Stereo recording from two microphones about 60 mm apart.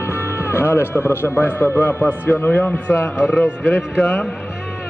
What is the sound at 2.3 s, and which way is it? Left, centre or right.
Speech, left.